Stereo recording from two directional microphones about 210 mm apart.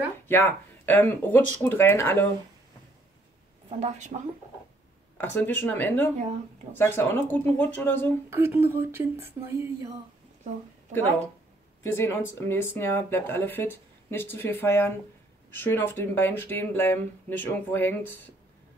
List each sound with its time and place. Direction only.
0.3 s speech: 10° left (ahead or behind)
3.6 s a woman's voice: 30° right (ahead or behind)
5.1 s speech: 10° left (ahead or behind)
8.3 s speech: 10° right (ahead or behind)
11.8 s speech: 10° left (ahead or behind)